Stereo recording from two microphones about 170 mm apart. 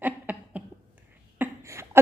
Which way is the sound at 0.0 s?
10° right (ahead or behind).